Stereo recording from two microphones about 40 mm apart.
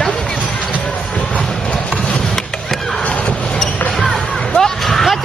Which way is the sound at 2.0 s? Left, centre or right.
Centre.